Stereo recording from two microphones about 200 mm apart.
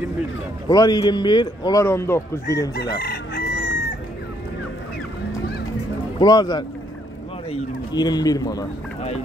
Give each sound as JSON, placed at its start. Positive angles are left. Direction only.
{"t": 0.7, "sound": "speech", "side_deg": 20}
{"t": 3.0, "sound": "chicken", "side_deg": 50}
{"t": 6.1, "sound": "speech", "side_deg": 20}
{"t": 7.9, "sound": "speech", "side_deg": 20}